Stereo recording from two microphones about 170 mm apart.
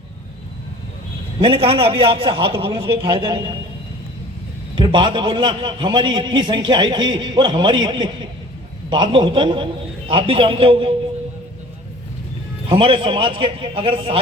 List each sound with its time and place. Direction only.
1.4 s a man's voice: 30° right (ahead or behind)
4.7 s a man's voice: 30° right (ahead or behind)
12.6 s a man's voice: 30° right (ahead or behind)